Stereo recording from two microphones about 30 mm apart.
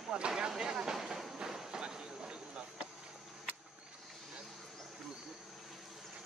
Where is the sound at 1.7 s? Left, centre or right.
Right.